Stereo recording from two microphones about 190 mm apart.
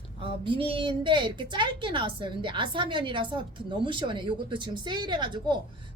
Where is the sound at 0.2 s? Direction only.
25° right (ahead or behind).